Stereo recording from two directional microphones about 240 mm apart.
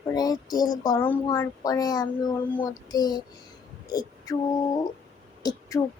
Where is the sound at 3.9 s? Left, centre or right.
Centre.